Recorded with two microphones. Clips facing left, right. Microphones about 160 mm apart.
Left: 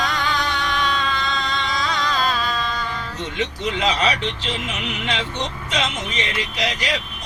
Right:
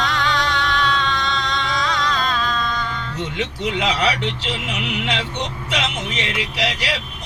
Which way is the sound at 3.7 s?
70° right (ahead or behind).